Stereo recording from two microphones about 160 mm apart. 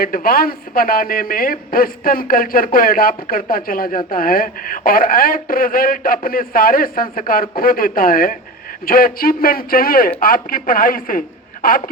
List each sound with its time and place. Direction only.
0.0 s speech: 65° left (ahead or behind)